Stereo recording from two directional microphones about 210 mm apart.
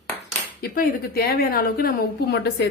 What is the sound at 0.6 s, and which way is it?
A woman's voice, 45° left (ahead or behind).